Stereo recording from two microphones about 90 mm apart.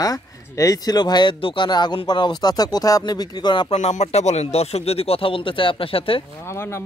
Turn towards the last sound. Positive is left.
turn(degrees=25)  # may be behind; listen again after turning